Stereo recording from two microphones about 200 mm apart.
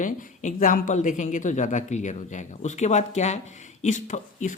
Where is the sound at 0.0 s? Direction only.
40° left (ahead or behind).